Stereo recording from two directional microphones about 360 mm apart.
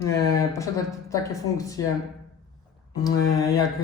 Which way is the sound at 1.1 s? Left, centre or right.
Centre.